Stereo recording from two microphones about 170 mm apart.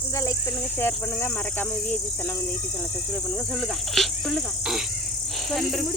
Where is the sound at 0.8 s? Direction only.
15° left (ahead or behind).